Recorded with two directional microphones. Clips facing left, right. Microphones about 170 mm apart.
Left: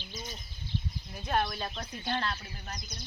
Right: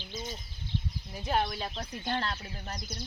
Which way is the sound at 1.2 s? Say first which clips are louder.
Right 1 dB; 10° right (ahead or behind).